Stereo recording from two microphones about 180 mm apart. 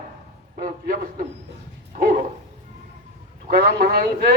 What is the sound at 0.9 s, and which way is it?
Speech, 50° right (ahead or behind).